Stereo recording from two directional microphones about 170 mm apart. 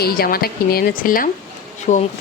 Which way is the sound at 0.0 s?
60° left (ahead or behind).